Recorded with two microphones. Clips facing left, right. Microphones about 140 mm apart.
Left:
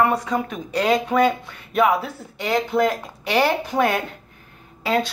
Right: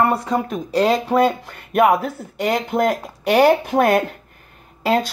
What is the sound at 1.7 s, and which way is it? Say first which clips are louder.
Speech: right 3 dB; 50° right (ahead or behind).